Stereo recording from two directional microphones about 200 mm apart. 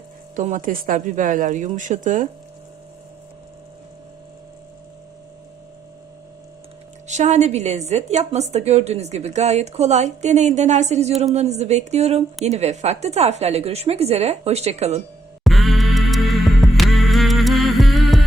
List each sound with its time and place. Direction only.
0.3 s a woman's voice: 40° right (ahead or behind)
7.1 s a woman's voice: 35° right (ahead or behind)
15.4 s music: centre (ahead or behind)